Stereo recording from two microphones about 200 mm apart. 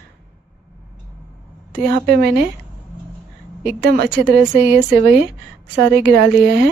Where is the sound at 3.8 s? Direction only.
55° right (ahead or behind).